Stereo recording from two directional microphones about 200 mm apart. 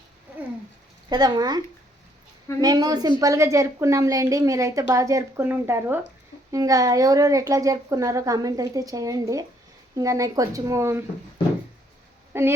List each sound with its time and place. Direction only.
1.1 s a woman's voice: 20° right (ahead or behind)
12.3 s speech: 10° right (ahead or behind)